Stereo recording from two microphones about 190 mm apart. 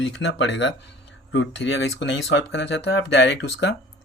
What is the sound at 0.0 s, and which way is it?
Speech, 65° left (ahead or behind).